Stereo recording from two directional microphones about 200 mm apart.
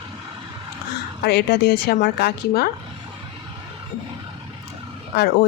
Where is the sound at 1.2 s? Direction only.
55° left (ahead or behind).